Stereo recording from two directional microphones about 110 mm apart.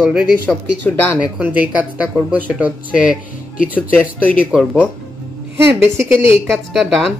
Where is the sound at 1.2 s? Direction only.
15° right (ahead or behind).